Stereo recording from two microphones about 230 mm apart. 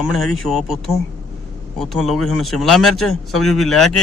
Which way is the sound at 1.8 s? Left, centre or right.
Centre.